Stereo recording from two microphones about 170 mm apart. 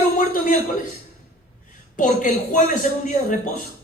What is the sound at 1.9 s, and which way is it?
A man's voice, 50° left (ahead or behind).